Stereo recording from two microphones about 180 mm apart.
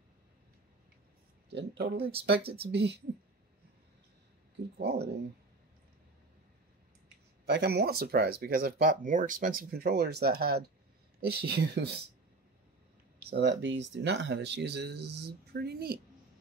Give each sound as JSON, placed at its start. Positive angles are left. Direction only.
{"t": 1.5, "sound": "speech", "side_deg": -65}
{"t": 4.8, "sound": "speech", "side_deg": -65}
{"t": 7.4, "sound": "speech", "side_deg": -70}
{"t": 13.3, "sound": "speech", "side_deg": -75}